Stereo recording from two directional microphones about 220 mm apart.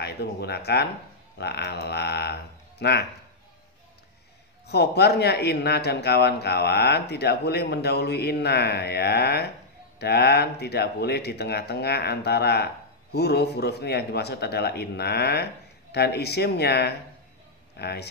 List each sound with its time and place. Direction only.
0.0 s a man's voice: 45° left (ahead or behind)
4.6 s a man's voice: 50° left (ahead or behind)